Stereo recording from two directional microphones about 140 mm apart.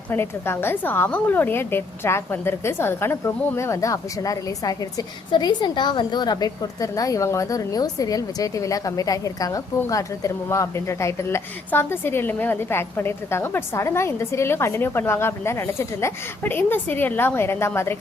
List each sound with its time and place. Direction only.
0.1 s a woman's voice: 15° left (ahead or behind)